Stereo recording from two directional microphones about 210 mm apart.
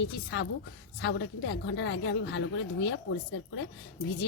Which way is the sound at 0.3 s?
55° left (ahead or behind).